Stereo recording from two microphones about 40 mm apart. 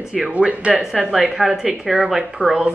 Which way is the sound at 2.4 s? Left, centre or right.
Right.